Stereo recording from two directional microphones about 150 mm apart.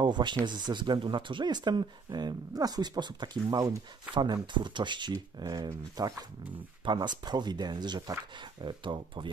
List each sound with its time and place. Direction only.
0.0 s speech: 30° right (ahead or behind)